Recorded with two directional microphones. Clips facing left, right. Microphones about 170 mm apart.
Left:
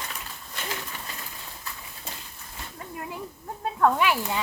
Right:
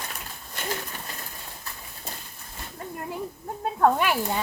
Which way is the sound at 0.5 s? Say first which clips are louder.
Right 3 dB; 45° right (ahead or behind).